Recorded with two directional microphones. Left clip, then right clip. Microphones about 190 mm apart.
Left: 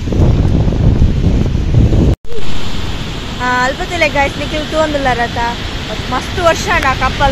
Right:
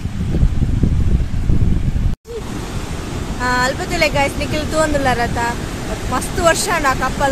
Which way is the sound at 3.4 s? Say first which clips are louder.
Left 3 dB; 15° left (ahead or behind).